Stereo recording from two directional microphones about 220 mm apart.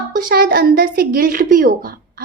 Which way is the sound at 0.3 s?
40° right (ahead or behind).